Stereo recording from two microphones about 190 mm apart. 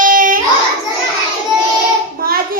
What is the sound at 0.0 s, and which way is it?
Child singing, 45° right (ahead or behind).